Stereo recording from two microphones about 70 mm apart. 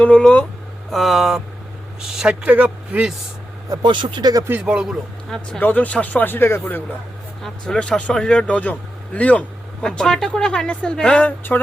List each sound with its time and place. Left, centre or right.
0.0 s speech: centre
0.9 s vehicle: centre
2.0 s speech: centre
2.4 s speech: centre
4.1 s speech: right
4.6 s speech: centre
5.5 s speech: left
7.4 s speech: centre
11.3 s speech: left